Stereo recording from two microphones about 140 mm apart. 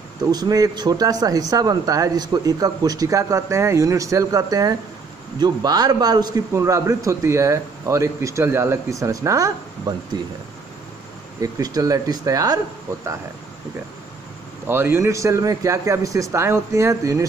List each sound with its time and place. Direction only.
0.3 s a man's voice: 30° right (ahead or behind)
11.5 s a man's voice: 25° right (ahead or behind)
14.7 s a man's voice: 15° right (ahead or behind)